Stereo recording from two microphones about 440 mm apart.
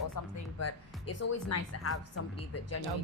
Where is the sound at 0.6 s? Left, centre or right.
Left.